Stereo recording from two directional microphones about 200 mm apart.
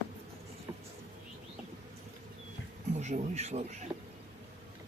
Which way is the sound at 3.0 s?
35° right (ahead or behind).